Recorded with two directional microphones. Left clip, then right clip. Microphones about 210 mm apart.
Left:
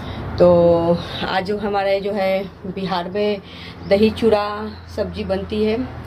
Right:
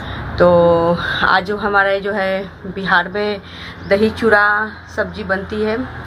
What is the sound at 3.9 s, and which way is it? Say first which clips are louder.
Speech: right 1 dB; 30° left (ahead or behind).